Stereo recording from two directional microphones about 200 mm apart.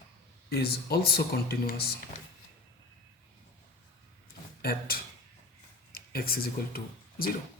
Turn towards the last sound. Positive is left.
turn(degrees=50)  # may be behind; listen again after turning